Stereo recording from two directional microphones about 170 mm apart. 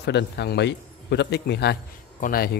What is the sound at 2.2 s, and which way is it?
Speech, 60° left (ahead or behind).